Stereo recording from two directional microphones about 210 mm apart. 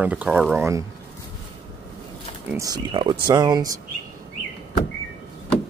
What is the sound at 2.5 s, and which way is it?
Speech, 15° right (ahead or behind).